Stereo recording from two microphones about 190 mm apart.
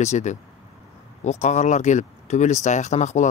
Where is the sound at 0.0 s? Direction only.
35° left (ahead or behind).